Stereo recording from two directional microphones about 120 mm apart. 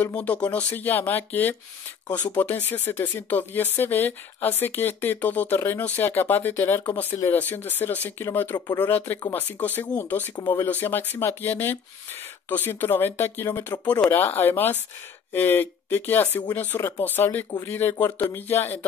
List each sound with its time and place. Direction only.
0.0 s speech: 10° left (ahead or behind)
8.5 s speech: 35° left (ahead or behind)
8.8 s speech: 15° left (ahead or behind)
10.3 s speech: 35° left (ahead or behind)
10.6 s speech: 15° left (ahead or behind)
17.9 s speech: 30° left (ahead or behind)
18.3 s speech: 15° left (ahead or behind)